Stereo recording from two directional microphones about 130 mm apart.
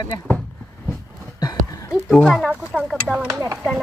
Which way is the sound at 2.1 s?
Centre (ahead or behind).